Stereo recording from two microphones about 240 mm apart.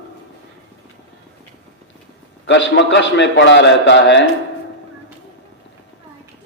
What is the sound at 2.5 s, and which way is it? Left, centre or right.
A man's voice, left.